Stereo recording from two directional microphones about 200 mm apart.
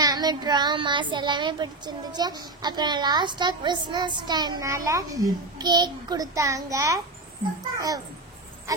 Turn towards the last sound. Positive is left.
turn(degrees=-20)  # may be behind; listen again after turning